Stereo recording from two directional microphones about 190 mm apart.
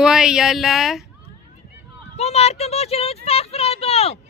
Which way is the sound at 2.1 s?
35° left (ahead or behind).